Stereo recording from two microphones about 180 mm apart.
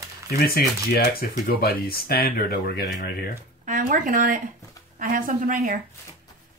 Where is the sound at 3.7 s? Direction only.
50° right (ahead or behind).